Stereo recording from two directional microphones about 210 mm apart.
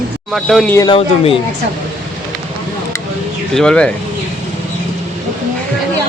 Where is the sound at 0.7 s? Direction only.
15° left (ahead or behind).